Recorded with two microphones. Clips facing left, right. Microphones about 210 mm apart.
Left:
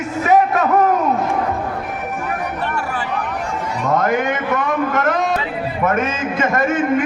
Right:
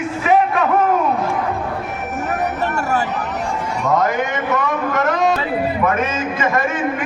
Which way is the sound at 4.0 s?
55° left (ahead or behind).